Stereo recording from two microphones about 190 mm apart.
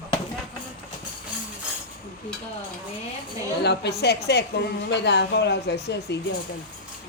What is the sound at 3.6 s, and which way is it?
A woman's voice, 60° left (ahead or behind).